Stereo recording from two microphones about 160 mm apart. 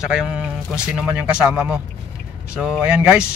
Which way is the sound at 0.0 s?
5° right (ahead or behind).